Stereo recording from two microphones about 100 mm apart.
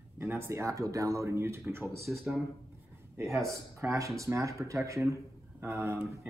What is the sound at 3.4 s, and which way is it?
Speech, 30° right (ahead or behind).